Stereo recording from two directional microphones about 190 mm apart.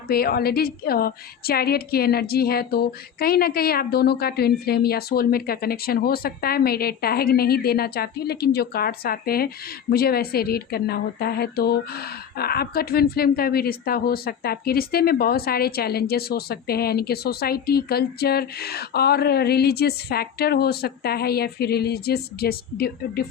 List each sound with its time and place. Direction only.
0.1 s a woman's voice: 55° left (ahead or behind)